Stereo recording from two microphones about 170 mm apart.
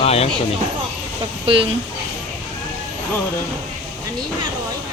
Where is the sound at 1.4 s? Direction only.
30° right (ahead or behind).